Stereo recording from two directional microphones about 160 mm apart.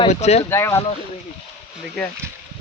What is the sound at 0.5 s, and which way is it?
Speech, 15° left (ahead or behind).